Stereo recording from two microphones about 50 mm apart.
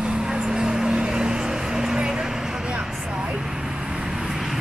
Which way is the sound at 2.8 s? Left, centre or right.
Centre.